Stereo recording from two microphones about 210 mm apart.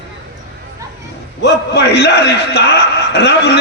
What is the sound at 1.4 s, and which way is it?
A man's voice, 55° left (ahead or behind).